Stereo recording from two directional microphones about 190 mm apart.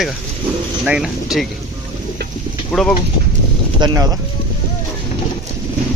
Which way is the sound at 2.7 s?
5° left (ahead or behind).